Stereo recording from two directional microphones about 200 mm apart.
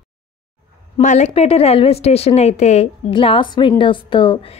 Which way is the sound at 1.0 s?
35° left (ahead or behind).